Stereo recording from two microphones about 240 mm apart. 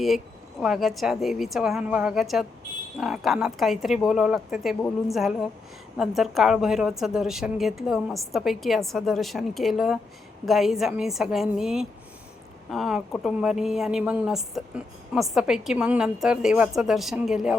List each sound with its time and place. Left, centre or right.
0.6 s a woman's voice: centre